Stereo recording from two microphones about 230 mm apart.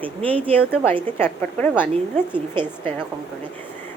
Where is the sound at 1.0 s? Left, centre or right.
Centre.